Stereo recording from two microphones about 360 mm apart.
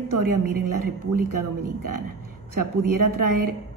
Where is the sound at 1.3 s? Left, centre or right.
Right.